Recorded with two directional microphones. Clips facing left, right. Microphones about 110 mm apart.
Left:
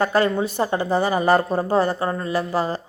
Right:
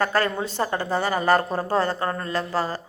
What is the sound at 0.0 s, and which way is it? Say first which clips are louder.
A woman's voice: left 4 dB; 15° left (ahead or behind).